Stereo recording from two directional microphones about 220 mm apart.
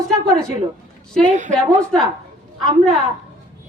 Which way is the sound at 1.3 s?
35° right (ahead or behind).